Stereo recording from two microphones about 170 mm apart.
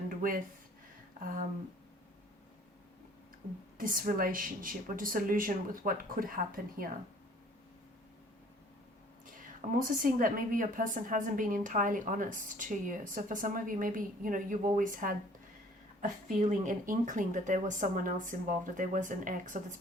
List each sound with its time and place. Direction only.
0.1 s a sound: 55° right (ahead or behind)
3.8 s speech: 55° right (ahead or behind)
9.2 s a woman's voice: 50° right (ahead or behind)